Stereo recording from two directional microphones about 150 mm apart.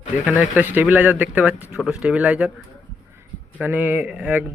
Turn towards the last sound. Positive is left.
turn(degrees=-10)  # may be behind; listen again after turning